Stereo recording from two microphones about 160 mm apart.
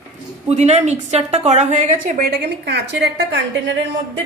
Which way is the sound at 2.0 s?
80° right.